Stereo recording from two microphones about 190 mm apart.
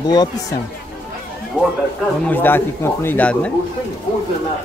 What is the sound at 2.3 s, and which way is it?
Speech, 10° left (ahead or behind).